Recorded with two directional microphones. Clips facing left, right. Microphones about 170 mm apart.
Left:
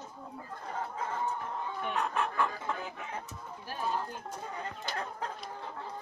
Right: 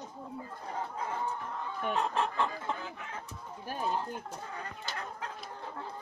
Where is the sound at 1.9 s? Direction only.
25° right (ahead or behind).